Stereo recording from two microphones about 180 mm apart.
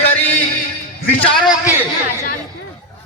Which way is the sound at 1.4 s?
15° left (ahead or behind).